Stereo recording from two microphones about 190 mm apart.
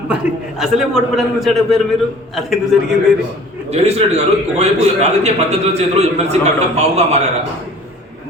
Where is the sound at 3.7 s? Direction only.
35° right (ahead or behind).